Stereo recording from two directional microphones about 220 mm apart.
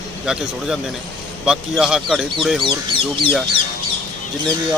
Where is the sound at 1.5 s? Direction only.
Centre (ahead or behind).